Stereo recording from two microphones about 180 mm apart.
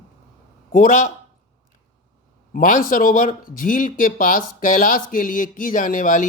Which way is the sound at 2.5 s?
50° left (ahead or behind).